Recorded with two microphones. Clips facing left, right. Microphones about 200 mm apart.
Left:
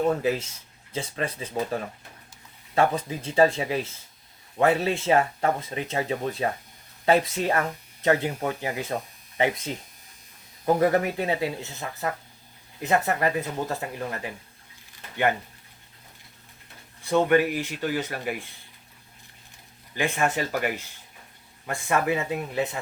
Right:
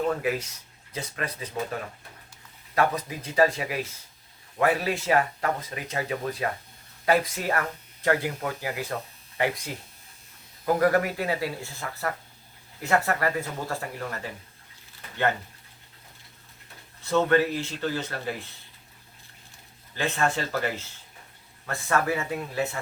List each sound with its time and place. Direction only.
0.0 s speech: 25° left (ahead or behind)
2.7 s speech: 25° left (ahead or behind)
10.8 s speech: 25° left (ahead or behind)
17.0 s speech: 15° left (ahead or behind)
20.0 s speech: 15° left (ahead or behind)